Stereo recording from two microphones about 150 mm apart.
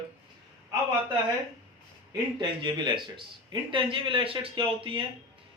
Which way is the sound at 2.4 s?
30° right (ahead or behind).